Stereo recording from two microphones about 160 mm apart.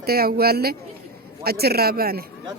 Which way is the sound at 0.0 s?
75° right (ahead or behind).